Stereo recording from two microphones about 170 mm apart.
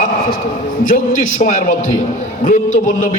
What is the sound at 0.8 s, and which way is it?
A man's voice, 50° left (ahead or behind).